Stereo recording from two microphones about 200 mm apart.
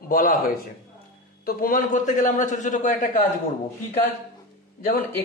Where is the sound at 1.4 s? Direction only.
45° left (ahead or behind).